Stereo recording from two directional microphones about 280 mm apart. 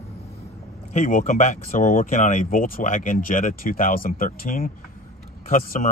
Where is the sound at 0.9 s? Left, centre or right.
Left.